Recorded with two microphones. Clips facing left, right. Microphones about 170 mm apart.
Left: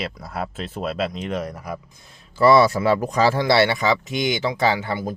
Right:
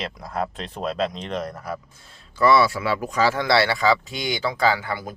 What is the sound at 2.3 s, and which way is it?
Speech, 35° left (ahead or behind).